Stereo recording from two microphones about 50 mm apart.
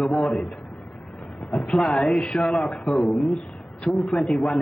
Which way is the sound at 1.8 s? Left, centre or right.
Centre.